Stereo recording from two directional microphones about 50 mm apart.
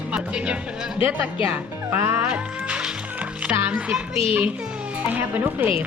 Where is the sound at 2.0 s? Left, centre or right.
Right.